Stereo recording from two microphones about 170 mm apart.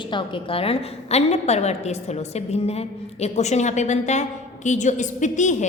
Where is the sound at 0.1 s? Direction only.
30° left (ahead or behind).